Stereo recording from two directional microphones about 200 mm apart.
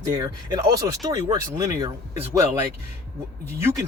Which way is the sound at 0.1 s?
20° right (ahead or behind).